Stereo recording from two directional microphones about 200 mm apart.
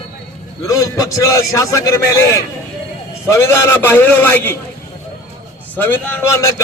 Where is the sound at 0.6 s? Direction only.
15° left (ahead or behind).